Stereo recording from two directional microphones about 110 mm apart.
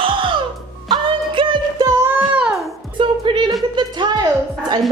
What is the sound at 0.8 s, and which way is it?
Music, 50° right (ahead or behind).